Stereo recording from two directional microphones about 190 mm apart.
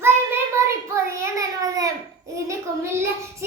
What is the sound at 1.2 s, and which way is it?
Child singing, 15° right (ahead or behind).